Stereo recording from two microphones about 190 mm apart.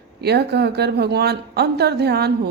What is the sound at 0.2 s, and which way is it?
A woman's voice, 60° right (ahead or behind).